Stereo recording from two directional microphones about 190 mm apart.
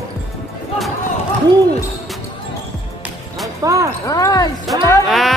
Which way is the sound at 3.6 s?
15° right (ahead or behind).